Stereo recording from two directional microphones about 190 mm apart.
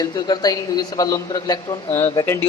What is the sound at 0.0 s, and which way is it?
A man's voice, 20° left (ahead or behind).